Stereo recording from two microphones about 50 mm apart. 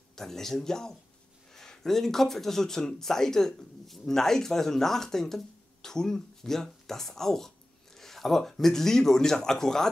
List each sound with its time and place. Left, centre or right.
0.1 s speech: centre